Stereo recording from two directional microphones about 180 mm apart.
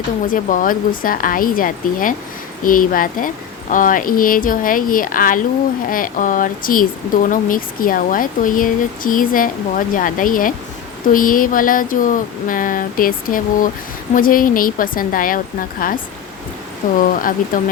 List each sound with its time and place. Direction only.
0.3 s speech: 45° left (ahead or behind)
17.0 s speech: 50° left (ahead or behind)